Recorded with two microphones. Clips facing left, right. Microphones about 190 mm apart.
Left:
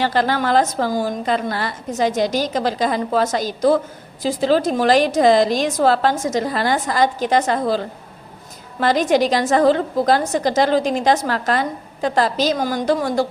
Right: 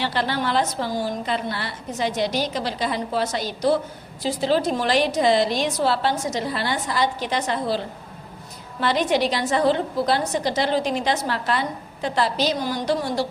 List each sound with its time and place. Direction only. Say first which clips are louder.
0.0 s a woman's voice: left 5 dB; 45° left (ahead or behind)
8.8 s a woman's voice: left 5 dB; 45° left (ahead or behind)